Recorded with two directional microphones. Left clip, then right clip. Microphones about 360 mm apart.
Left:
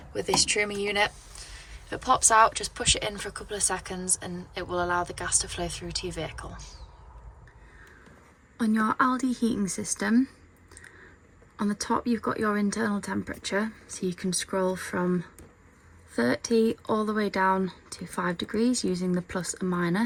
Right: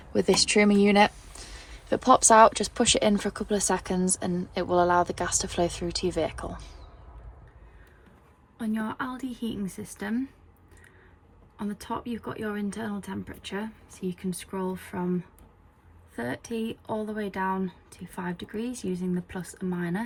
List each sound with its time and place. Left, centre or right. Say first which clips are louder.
0.1 s speech: right 3 dB; centre
8.5 s speech: left 7 dB; centre
11.5 s speech: left 6 dB; centre
16.1 s speech: left 8 dB; centre
16.8 s speech: left 5 dB; left
17.2 s speech: left 6 dB; centre